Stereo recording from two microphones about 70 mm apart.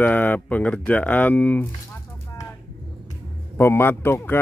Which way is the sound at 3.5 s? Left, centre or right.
Left.